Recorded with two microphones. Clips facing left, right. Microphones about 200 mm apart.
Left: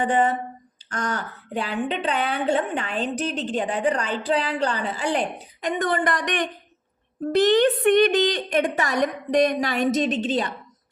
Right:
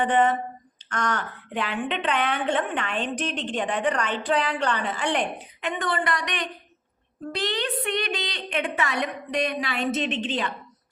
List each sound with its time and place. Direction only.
1.1 s a woman's voice: 35° left (ahead or behind)